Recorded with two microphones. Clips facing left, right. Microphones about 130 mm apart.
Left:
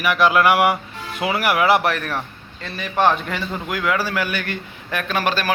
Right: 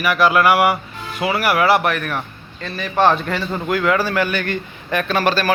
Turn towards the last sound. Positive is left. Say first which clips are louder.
# right 4 dB
turn(degrees=15)  # may be behind; listen again after turning